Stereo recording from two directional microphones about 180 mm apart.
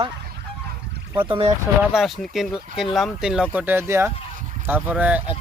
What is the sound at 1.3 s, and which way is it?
Goose, 30° right (ahead or behind).